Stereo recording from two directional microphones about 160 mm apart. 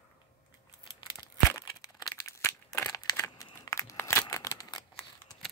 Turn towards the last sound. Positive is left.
turn(degrees=20)  # may be behind; listen again after turning